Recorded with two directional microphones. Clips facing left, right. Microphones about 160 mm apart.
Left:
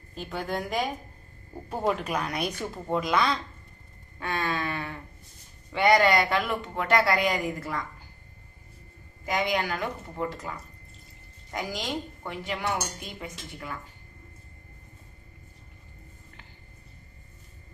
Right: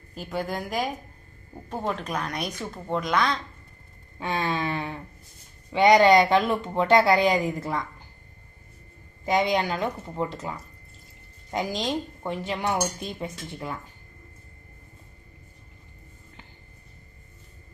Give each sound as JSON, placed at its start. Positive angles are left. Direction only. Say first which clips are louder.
{"t": 0.1, "sound": "speech", "louder": "right 2 dB", "side_deg": -5}
{"t": 4.2, "sound": "speech", "louder": "right 3 dB", "side_deg": -20}
{"t": 9.2, "sound": "speech", "louder": "right 4 dB", "side_deg": -25}
{"t": 11.5, "sound": "speech", "louder": "right 5 dB", "side_deg": -25}